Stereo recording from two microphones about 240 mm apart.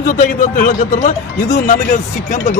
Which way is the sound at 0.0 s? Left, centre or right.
Left.